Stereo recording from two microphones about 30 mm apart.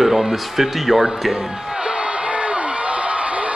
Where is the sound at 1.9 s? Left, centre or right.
Right.